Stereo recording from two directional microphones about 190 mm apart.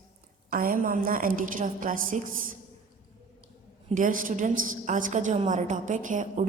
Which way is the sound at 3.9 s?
45° right (ahead or behind).